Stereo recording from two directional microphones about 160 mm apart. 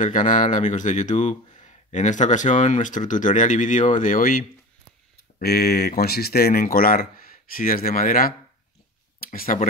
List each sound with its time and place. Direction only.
0.0 s speech: 50° left (ahead or behind)
5.4 s speech: 75° left (ahead or behind)